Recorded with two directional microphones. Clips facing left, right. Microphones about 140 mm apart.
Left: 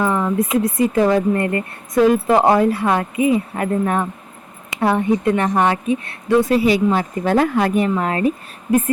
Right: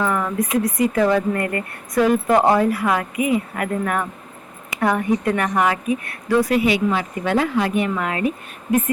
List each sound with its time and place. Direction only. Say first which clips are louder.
0.1 s speech: left 3 dB; 25° left (ahead or behind); by 7.9 s 45° left (ahead or behind)
7.9 s speech: left 3 dB; 35° left (ahead or behind)